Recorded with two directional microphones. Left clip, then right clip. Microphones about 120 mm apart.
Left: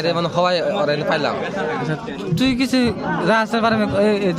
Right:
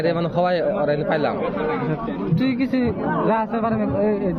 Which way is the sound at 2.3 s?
75° left (ahead or behind).